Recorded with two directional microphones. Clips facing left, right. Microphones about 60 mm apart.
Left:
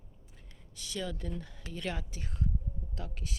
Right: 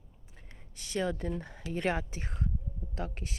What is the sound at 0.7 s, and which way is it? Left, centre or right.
Speech, right.